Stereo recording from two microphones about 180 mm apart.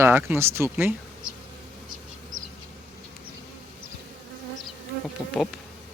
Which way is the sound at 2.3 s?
45° right (ahead or behind).